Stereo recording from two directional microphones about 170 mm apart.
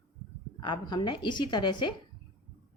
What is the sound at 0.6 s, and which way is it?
Speech, 25° left (ahead or behind).